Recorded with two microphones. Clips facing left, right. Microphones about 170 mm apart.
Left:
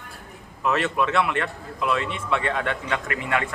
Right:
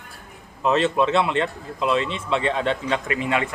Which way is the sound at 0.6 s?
25° right (ahead or behind).